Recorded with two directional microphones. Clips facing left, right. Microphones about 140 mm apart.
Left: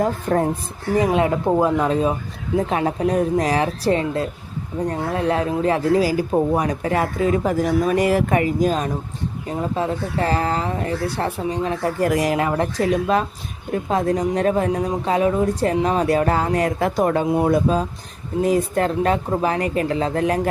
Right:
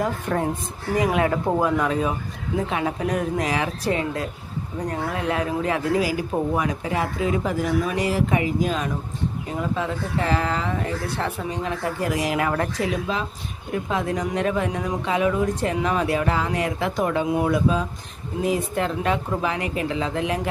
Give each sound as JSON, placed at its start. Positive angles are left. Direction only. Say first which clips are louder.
{"t": 0.0, "sound": "speech", "louder": "left 4 dB", "side_deg": 40}